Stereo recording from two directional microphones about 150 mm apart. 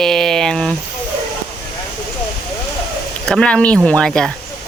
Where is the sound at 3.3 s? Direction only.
5° left (ahead or behind).